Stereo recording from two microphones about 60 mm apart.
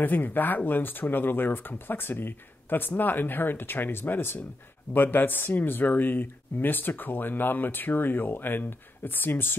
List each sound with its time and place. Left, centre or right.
0.0 s speech: left